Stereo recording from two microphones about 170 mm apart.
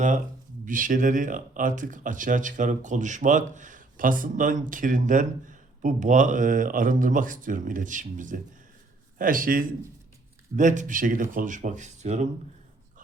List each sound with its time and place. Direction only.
0.6 s a man's voice: 50° right (ahead or behind)